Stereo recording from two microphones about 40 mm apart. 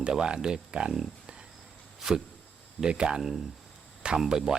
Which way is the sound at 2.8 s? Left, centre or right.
Right.